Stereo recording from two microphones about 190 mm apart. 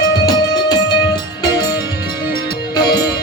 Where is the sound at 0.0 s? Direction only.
20° left (ahead or behind).